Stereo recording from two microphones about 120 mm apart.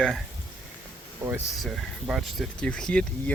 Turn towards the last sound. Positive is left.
turn(degrees=10)  # may be behind; listen again after turning